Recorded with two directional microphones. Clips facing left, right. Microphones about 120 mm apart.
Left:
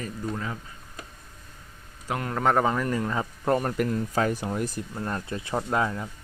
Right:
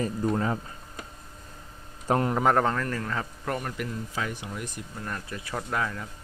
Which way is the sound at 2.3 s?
Centre (ahead or behind).